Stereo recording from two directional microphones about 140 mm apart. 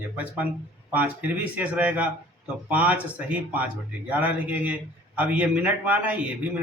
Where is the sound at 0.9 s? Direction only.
10° right (ahead or behind).